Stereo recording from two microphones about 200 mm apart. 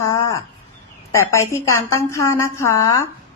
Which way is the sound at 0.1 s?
15° left (ahead or behind).